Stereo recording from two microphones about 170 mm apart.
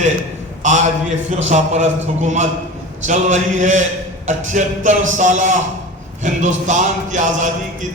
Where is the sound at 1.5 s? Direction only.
45° right (ahead or behind).